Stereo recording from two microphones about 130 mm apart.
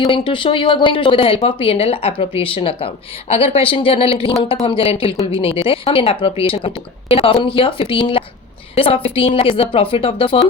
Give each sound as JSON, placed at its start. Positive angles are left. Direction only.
{"t": 0.1, "sound": "speech", "side_deg": 40}